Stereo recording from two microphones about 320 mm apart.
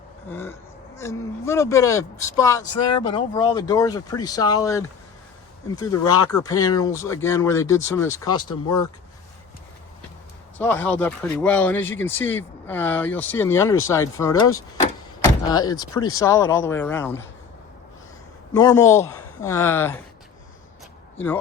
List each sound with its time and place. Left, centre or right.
0.3 s speech: centre
8.3 s speech: left
10.6 s speech: centre
18.5 s speech: centre